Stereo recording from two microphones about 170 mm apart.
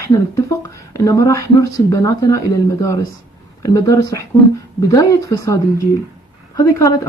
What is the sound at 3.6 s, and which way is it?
Speech, 20° left (ahead or behind).